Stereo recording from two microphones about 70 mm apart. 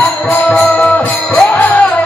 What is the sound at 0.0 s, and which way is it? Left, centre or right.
Music, left.